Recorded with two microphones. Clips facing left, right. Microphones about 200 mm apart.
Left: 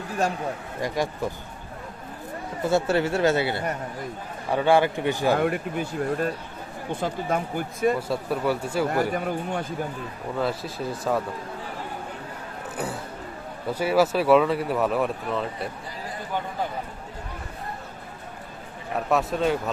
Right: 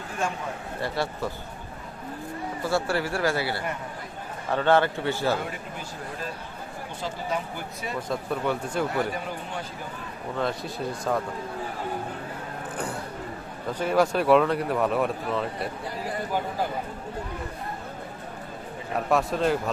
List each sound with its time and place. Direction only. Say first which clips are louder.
0.2 s a man's voice: left 4 dB; 40° left (ahead or behind)
0.8 s speech: left 2 dB; 15° left (ahead or behind)
2.6 s speech: left 4 dB; 20° left (ahead or behind)
4.5 s speech: left 2 dB; 10° left (ahead or behind)
5.4 s speech: left 10 dB; 60° left (ahead or behind)
8.0 s speech: left 2 dB; 5° left (ahead or behind)
9.1 s speech: left 6 dB; 50° left (ahead or behind)
10.3 s speech: left 1 dB; 5° left (ahead or behind)
12.7 s vehicle: left 2 dB; 5° left (ahead or behind)
13.7 s speech: left 2 dB; 10° left (ahead or behind)
19.1 s speech: even; centre (ahead or behind)